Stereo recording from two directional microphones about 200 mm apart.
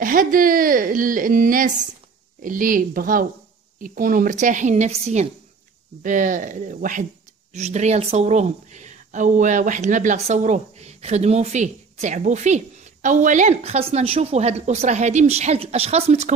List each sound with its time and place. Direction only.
0.0 s a woman's voice: 45° right (ahead or behind)